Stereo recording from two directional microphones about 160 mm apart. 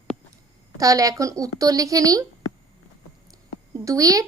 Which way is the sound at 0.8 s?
20° right (ahead or behind).